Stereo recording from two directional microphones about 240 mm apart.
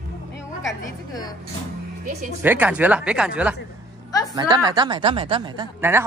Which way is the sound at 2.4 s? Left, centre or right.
Centre.